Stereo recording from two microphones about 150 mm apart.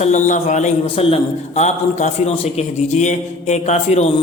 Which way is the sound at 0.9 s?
40° left (ahead or behind).